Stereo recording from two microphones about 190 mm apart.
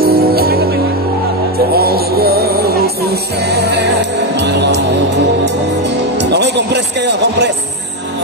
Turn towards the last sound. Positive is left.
turn(degrees=-65)  # may be behind; listen again after turning